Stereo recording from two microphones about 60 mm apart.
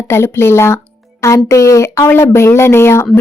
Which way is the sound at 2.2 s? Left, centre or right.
Left.